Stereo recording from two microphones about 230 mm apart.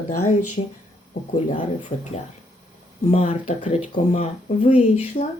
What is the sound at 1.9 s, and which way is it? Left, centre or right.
Speech, left.